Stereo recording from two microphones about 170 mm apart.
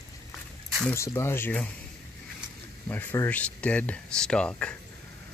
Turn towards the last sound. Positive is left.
turn(degrees=5)  # may be behind; listen again after turning